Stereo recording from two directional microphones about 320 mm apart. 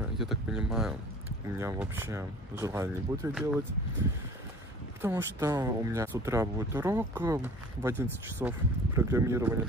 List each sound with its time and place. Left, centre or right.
0.2 s speech: centre
5.0 s speech: centre